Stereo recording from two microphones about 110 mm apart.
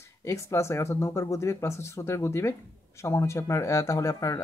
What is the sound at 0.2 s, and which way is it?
Speech, 25° left (ahead or behind).